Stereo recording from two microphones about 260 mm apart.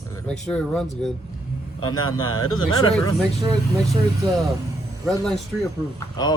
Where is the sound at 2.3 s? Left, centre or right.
Left.